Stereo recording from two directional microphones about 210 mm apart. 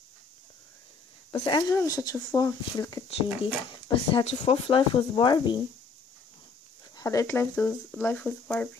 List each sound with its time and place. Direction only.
1.4 s speech: 20° left (ahead or behind)
7.0 s speech: 15° left (ahead or behind)